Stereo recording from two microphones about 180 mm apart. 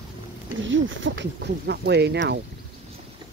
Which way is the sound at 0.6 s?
90° right.